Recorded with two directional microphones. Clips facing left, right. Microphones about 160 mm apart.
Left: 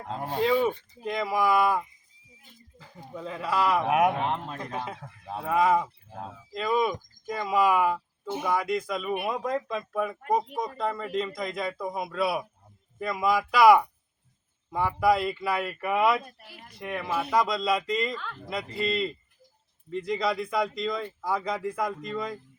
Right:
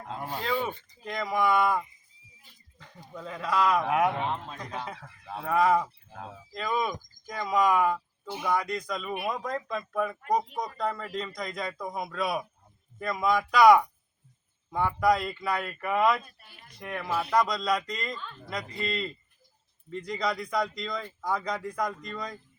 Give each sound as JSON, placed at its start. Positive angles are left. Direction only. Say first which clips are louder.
{"t": 0.1, "sound": "a sound", "louder": "left 6 dB", "side_deg": 30}
{"t": 0.4, "sound": "speech", "louder": "left 7 dB", "side_deg": 5}
{"t": 2.7, "sound": "a sound", "louder": "left 1 dB", "side_deg": 5}
{"t": 3.2, "sound": "speech", "louder": "even", "side_deg": 5}
{"t": 3.8, "sound": "speech", "louder": "left 3 dB", "side_deg": 20}
{"t": 4.2, "sound": "speech", "louder": "left 2 dB", "side_deg": 50}
{"t": 4.9, "sound": "speech", "louder": "left 4 dB", "side_deg": 25}
{"t": 5.4, "sound": "speech", "louder": "left 1 dB", "side_deg": 5}